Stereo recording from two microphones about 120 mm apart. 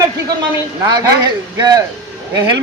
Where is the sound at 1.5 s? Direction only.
30° right (ahead or behind).